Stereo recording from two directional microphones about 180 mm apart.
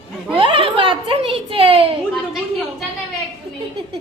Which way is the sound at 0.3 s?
30° right (ahead or behind).